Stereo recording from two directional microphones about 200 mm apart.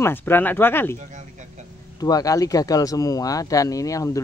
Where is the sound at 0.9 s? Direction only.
35° right (ahead or behind).